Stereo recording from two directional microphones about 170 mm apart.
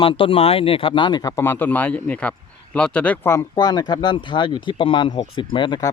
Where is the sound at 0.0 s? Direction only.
30° left (ahead or behind).